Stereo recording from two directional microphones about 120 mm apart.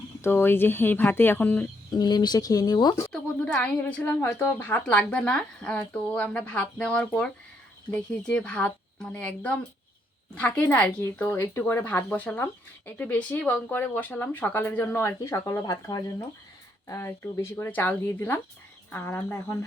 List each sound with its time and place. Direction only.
0.2 s a woman's voice: 20° left (ahead or behind)
1.9 s speech: 35° left (ahead or behind)
3.1 s a woman's voice: 5° left (ahead or behind)